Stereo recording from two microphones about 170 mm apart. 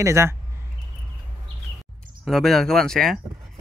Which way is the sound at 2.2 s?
Centre (ahead or behind).